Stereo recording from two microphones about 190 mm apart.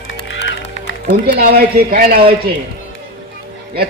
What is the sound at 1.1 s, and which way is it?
A woman's voice, 55° right (ahead or behind).